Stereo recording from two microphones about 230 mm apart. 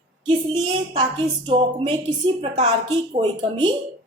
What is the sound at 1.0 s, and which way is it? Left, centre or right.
A woman's voice, right.